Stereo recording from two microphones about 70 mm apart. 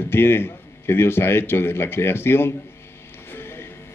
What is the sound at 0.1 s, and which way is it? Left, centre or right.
A man's voice, left.